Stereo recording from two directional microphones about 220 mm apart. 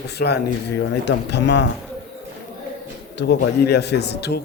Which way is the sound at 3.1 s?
50° left (ahead or behind).